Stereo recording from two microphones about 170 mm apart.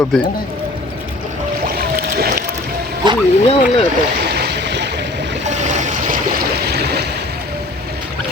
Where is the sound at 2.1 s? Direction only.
65° right (ahead or behind).